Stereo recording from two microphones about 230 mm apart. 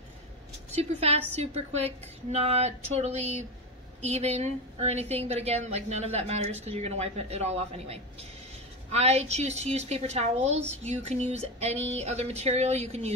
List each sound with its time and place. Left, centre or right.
0.7 s a woman's voice: right